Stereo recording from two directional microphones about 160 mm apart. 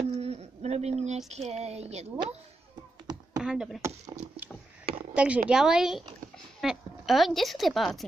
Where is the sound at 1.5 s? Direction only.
40° right (ahead or behind).